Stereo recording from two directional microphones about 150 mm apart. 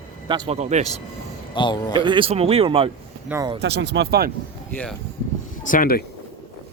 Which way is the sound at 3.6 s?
90° right.